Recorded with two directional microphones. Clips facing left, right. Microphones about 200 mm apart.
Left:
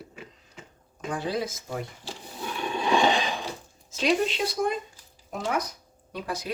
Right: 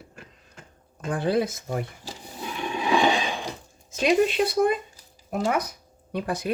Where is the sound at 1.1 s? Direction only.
55° right (ahead or behind).